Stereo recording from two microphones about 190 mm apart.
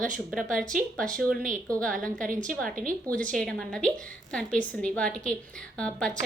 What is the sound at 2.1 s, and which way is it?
Speech, 45° right (ahead or behind).